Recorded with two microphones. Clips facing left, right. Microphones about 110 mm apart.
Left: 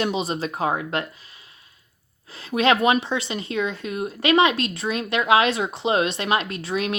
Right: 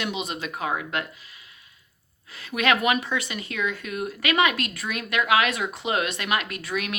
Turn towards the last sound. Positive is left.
turn(degrees=30)  # may be behind; listen again after turning